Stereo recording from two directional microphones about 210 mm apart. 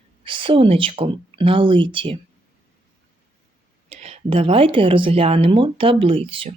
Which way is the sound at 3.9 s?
30° right (ahead or behind).